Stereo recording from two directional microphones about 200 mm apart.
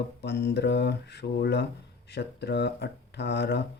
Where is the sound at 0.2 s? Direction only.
55° left (ahead or behind).